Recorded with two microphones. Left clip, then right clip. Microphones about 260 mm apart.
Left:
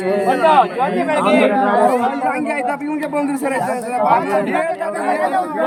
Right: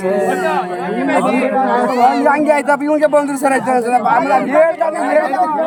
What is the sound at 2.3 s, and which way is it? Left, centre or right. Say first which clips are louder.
Speech: right 7 dB; centre.